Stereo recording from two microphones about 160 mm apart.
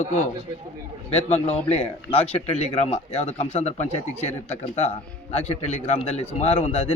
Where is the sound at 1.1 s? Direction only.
40° left (ahead or behind).